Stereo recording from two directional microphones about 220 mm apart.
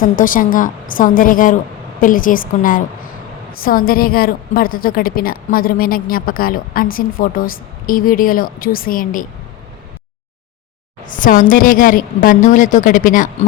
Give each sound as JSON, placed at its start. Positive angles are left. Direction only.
{"t": 0.2, "sound": "a woman's voice", "side_deg": 40}
{"t": 11.1, "sound": "a woman's voice", "side_deg": 35}